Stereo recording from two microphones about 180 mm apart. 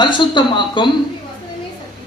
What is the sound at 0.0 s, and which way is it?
Speech, 25° left (ahead or behind).